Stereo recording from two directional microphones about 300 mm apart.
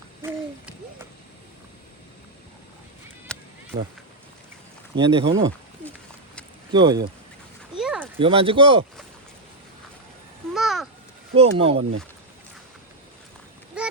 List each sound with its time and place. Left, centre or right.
0.2 s hoot: centre
3.3 s run: centre
4.9 s speech: centre
5.2 s speech: right
6.7 s speech: centre
7.8 s a sound: centre
8.2 s speech: centre
10.5 s babbling: centre
11.3 s speech: centre
11.8 s speech: right